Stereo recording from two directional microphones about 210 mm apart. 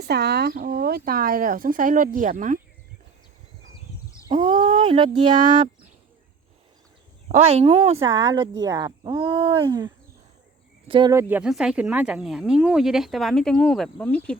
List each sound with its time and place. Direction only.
0.0 s speech: 50° right (ahead or behind)
4.3 s speech: 30° right (ahead or behind)
7.3 s speech: 30° right (ahead or behind)
8.3 s speech: 20° right (ahead or behind); by 14.3 s 5° left (ahead or behind)